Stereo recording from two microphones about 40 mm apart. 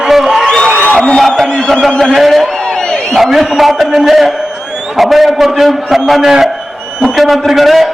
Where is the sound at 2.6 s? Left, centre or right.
Centre.